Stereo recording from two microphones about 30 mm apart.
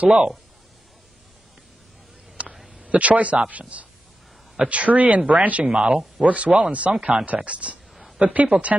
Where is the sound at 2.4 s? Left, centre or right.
Right.